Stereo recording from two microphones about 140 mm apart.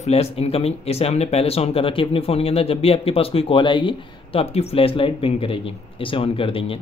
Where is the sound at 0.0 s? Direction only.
45° left (ahead or behind).